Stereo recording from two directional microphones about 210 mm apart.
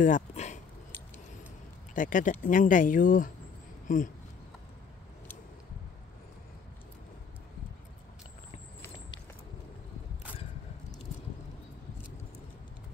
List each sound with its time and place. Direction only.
0.0 s speech: 35° left (ahead or behind)
2.0 s speech: 40° left (ahead or behind)
3.8 s a sound: 40° left (ahead or behind)